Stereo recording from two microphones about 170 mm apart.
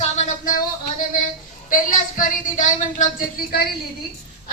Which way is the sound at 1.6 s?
50° left (ahead or behind).